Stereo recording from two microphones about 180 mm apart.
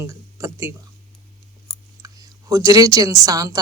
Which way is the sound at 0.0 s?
15° right (ahead or behind).